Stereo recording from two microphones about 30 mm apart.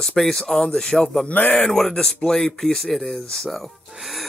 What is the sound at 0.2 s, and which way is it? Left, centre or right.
Speech, centre.